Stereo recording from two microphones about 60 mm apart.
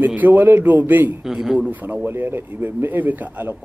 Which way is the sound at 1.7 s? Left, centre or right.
Right.